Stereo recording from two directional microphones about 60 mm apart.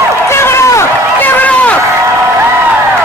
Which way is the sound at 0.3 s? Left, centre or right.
Left.